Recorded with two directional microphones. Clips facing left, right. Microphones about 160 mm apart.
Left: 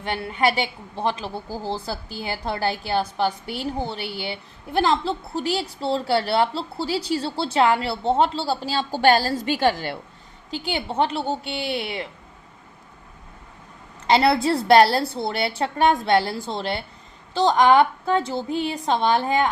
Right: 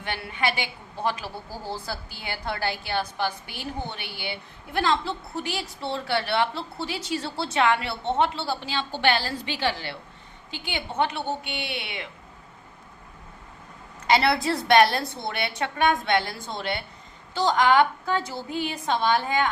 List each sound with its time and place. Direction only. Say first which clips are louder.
0.0 s a woman's voice: left 6 dB; 30° left (ahead or behind); by 10.0 s 45° left (ahead or behind)
10.5 s a woman's voice: left 6 dB; 35° left (ahead or behind)
14.1 s a woman's voice: left 4 dB; 25° left (ahead or behind)